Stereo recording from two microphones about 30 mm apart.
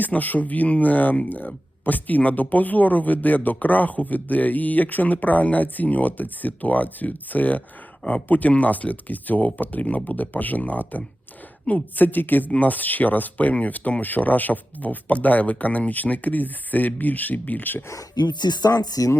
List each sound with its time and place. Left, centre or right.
0.0 s speech: left
5.1 s speech: left
10.6 s speech: left
11.9 s speech: left
12.5 s speech: left
15.9 s speech: left